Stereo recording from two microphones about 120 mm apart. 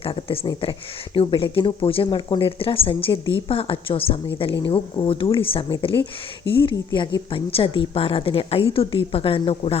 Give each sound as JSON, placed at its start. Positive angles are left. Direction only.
{"t": 0.0, "sound": "speech", "side_deg": 50}